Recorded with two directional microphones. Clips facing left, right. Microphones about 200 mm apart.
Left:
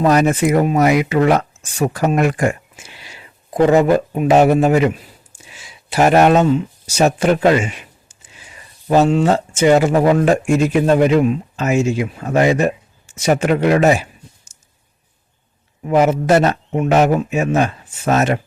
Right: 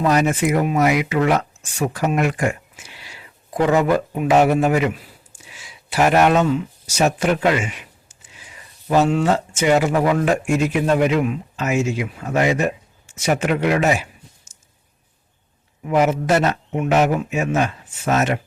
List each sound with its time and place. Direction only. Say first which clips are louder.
0.0 s speech: left 4 dB; 40° left (ahead or behind)
3.0 s speech: left 2 dB; 25° left (ahead or behind)
15.8 s speech: left 3 dB; 35° left (ahead or behind)